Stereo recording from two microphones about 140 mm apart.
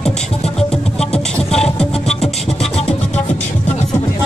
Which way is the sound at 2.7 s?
45° left (ahead or behind).